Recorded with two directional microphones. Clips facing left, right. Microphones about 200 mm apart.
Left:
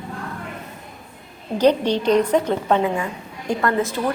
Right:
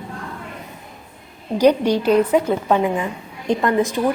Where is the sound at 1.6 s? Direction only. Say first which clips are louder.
Right 2 dB; 10° right (ahead or behind).